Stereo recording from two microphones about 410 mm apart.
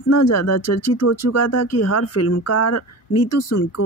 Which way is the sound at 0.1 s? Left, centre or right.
Left.